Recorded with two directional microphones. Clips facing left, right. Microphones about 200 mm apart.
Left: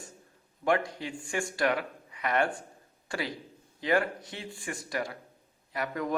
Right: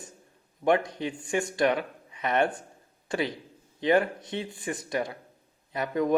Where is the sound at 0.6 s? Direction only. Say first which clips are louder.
Right 4 dB; 20° right (ahead or behind).